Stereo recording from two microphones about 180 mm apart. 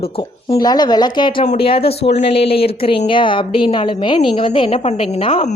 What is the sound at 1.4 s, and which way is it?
A woman's voice, 35° left (ahead or behind).